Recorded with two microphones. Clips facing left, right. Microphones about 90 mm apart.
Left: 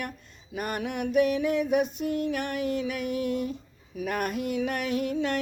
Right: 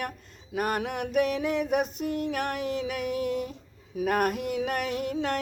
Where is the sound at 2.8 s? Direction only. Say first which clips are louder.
Even; 55° right (ahead or behind).